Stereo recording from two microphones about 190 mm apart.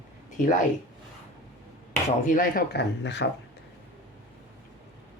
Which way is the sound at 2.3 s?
50° left (ahead or behind).